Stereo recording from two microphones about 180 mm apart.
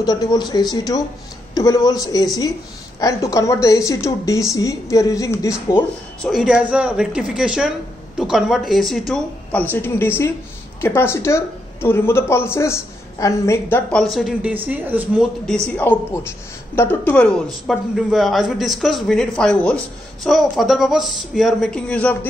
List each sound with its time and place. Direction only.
0.0 s speech: 20° left (ahead or behind)
5.8 s a woman's voice: centre (ahead or behind)
14.0 s a woman's voice: centre (ahead or behind)
15.4 s a woman's voice: 5° left (ahead or behind)